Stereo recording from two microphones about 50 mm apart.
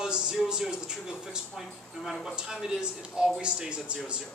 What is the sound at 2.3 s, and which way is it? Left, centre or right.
Speech, centre.